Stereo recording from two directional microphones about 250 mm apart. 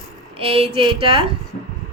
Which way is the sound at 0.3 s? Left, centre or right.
Right.